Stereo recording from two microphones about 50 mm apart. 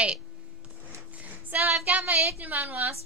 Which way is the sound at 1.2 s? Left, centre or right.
Right.